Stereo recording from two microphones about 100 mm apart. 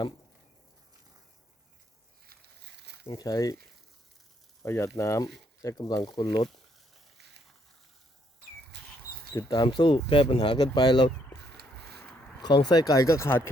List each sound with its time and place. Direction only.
3.2 s speech: 35° left (ahead or behind)
4.6 s speech: 30° left (ahead or behind)
9.5 s speech: 45° left (ahead or behind); by 10.4 s 65° left (ahead or behind)
10.4 s speech: 50° left (ahead or behind)
12.4 s speech: 45° left (ahead or behind); by 13.5 s 25° left (ahead or behind)